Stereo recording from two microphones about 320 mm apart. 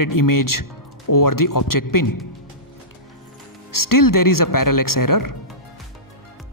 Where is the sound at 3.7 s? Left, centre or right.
Left.